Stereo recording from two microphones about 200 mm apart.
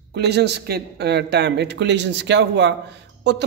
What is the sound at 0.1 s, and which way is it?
Speech, 55° right (ahead or behind).